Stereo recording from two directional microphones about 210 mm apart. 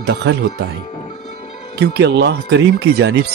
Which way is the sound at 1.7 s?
55° right (ahead or behind).